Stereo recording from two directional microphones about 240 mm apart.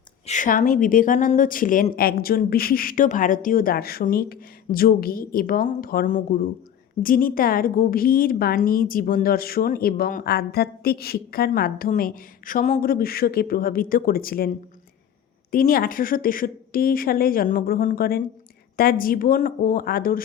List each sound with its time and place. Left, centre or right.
0.3 s a woman's voice: left
15.5 s a woman's voice: left